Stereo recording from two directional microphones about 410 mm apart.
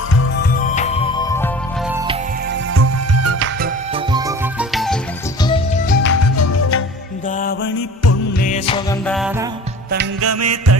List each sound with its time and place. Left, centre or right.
0.5 s music: centre
2.5 s music: right
3.9 s music: centre
5.4 s music: centre; by 6.8 s left
7.3 s music: centre
9.9 s music: right
10.2 s music: right